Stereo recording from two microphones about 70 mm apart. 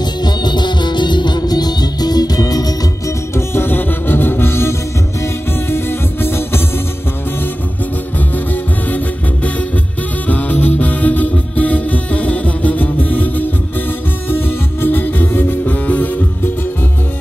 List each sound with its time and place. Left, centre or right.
0.0 s music: left
3.3 s music: left
8.8 s music: left